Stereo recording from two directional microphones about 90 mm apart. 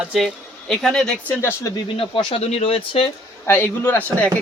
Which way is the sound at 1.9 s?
80° left.